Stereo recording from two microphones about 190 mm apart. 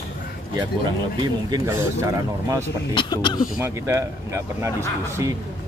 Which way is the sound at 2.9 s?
25° left (ahead or behind).